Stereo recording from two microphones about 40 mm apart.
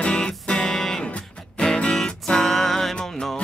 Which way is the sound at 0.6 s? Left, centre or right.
Centre.